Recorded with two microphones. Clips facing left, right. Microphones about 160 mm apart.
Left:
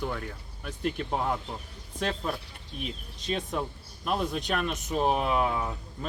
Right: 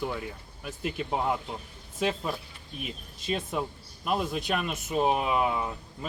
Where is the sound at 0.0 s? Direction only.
10° right (ahead or behind).